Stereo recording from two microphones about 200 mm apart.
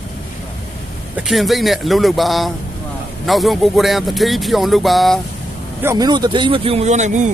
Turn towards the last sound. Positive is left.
turn(degrees=-35)  # may be behind; listen again after turning